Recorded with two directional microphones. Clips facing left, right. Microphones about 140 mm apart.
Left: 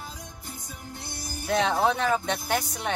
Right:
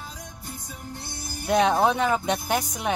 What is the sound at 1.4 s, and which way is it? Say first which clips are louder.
Speech: right 3 dB; 15° right (ahead or behind).